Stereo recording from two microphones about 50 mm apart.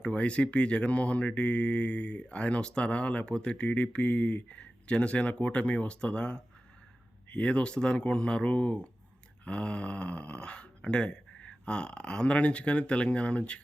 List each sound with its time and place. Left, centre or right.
0.0 s speech: left